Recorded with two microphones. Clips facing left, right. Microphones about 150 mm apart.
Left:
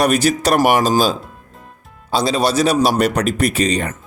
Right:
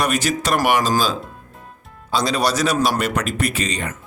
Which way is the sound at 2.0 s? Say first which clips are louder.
Left 3 dB; 30° left (ahead or behind).